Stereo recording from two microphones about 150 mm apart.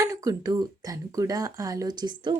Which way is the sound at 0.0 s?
20° right (ahead or behind).